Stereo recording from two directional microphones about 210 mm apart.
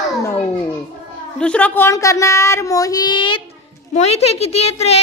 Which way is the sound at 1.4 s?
5° left (ahead or behind).